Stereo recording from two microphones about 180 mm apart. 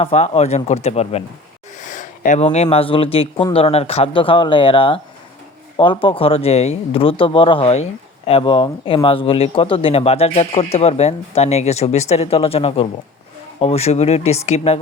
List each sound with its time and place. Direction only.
0.0 s speech: 35° left (ahead or behind)